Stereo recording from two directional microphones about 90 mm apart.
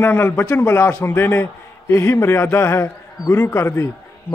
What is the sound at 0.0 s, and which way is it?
A man's voice, 25° left (ahead or behind).